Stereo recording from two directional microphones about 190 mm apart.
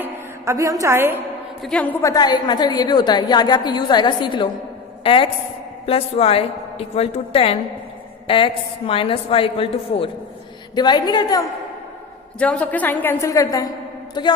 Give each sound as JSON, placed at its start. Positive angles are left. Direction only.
{"t": 0.0, "sound": "a woman's voice", "side_deg": -15}
{"t": 1.6, "sound": "a woman's voice", "side_deg": 5}
{"t": 12.4, "sound": "a woman's voice", "side_deg": 5}